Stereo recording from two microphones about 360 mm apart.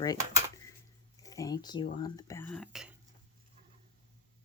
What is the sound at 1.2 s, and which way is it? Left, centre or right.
Speech, centre.